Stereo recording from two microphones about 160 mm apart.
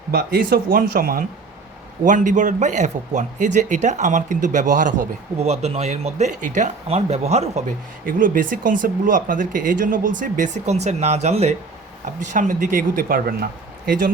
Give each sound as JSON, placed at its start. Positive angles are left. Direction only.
{"t": 0.1, "sound": "speech", "side_deg": -65}
{"t": 2.0, "sound": "speech", "side_deg": -50}
{"t": 5.4, "sound": "speech", "side_deg": -40}
{"t": 8.0, "sound": "speech", "side_deg": -60}
{"t": 12.3, "sound": "speech", "side_deg": -55}